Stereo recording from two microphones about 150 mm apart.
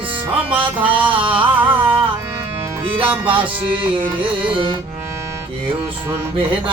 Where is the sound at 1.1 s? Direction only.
35° right (ahead or behind).